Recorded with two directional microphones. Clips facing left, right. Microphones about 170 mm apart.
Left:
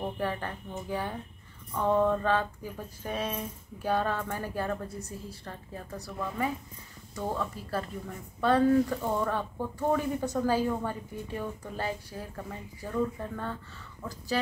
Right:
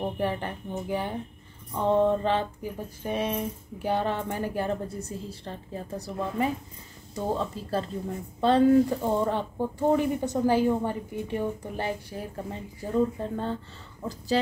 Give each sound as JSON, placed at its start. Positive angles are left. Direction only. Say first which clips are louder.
{"t": 0.0, "sound": "speech", "louder": "right 4 dB", "side_deg": -20}